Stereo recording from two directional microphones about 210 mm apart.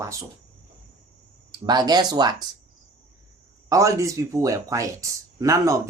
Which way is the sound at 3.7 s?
15° right (ahead or behind).